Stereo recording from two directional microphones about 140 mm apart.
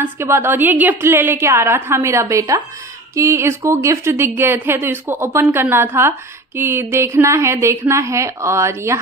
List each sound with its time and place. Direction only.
0.0 s a woman's voice: 15° right (ahead or behind)